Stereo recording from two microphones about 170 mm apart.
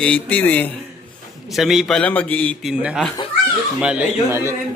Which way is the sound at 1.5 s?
Centre (ahead or behind).